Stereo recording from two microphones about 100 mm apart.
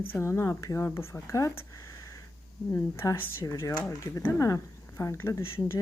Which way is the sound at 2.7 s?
25° left (ahead or behind).